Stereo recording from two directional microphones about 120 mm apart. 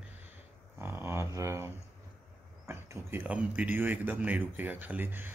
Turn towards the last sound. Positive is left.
turn(degrees=-15)  # may be behind; listen again after turning